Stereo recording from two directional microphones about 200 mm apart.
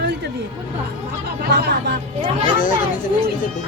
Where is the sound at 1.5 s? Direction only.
55° right (ahead or behind).